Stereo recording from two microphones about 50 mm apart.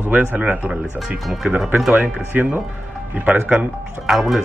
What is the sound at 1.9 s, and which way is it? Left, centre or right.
Speech, right.